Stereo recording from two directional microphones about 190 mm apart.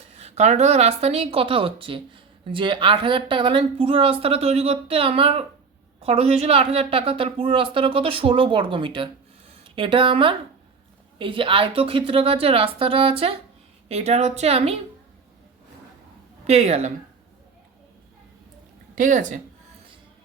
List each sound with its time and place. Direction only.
0.1 s a woman's voice: 35° right (ahead or behind)
16.5 s a woman's voice: 35° right (ahead or behind)
18.9 s a woman's voice: 45° right (ahead or behind)